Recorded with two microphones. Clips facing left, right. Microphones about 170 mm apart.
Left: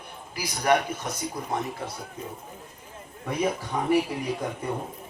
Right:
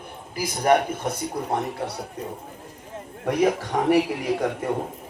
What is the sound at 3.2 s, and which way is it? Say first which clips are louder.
A man's voice: right 6 dB; 80° right.